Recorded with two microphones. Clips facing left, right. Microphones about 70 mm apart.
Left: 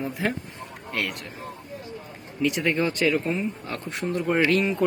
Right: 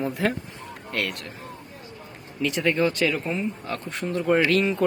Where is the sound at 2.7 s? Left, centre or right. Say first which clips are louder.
Right 2 dB; left.